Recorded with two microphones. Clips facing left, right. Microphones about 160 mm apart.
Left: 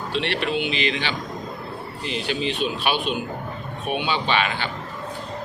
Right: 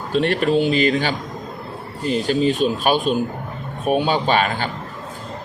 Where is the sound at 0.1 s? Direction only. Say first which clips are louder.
Right 8 dB; 45° right (ahead or behind).